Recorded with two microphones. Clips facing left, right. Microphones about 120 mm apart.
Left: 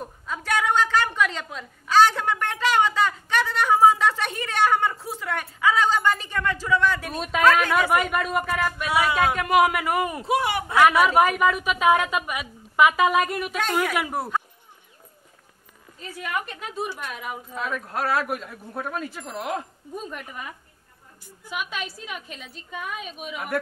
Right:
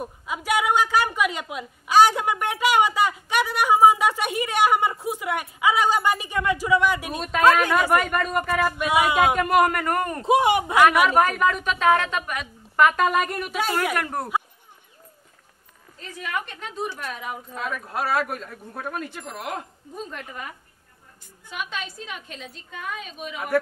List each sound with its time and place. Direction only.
0.0 s a woman's voice: 10° right (ahead or behind)
7.2 s speech: centre (ahead or behind)
7.4 s a woman's voice: 15° right (ahead or behind)
7.9 s speech: 10° left (ahead or behind)
8.5 s a woman's voice: 10° right (ahead or behind)
9.4 s speech: centre (ahead or behind)
10.2 s speech: 20° right (ahead or behind)
10.8 s a woman's voice: 10° left (ahead or behind)
16.0 s speech: 5° left (ahead or behind)
21.5 s a woman's voice: 10° left (ahead or behind)